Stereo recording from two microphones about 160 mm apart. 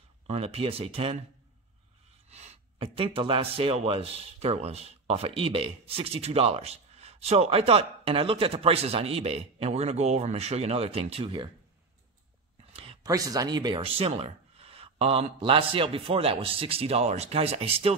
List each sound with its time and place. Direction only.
0.3 s speech: 40° right (ahead or behind)
2.2 s speech: 40° right (ahead or behind)
12.7 s a sound: 35° right (ahead or behind)
13.1 s speech: 20° right (ahead or behind)